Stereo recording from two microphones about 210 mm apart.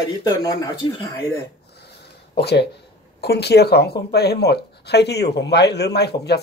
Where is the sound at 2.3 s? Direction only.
50° left (ahead or behind).